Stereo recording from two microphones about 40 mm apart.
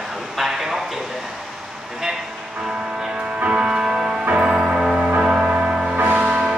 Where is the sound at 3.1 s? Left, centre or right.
Right.